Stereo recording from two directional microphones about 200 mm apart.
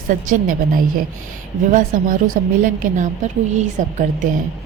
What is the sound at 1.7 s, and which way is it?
A woman's voice, 45° right (ahead or behind).